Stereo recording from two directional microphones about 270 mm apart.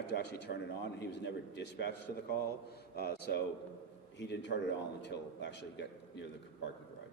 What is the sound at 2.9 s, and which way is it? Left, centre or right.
Speech, left.